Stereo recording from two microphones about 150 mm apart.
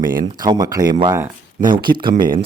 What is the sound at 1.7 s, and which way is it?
Speech, 75° right (ahead or behind).